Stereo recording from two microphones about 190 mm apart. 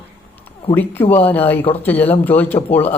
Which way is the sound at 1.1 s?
10° left (ahead or behind).